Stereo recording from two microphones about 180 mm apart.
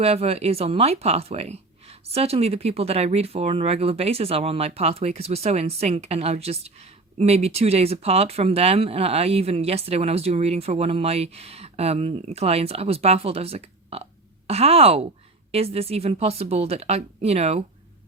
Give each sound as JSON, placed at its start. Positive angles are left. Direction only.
{"t": 0.0, "sound": "speech", "side_deg": -35}